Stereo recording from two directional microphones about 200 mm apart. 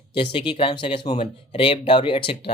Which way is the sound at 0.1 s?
25° left (ahead or behind).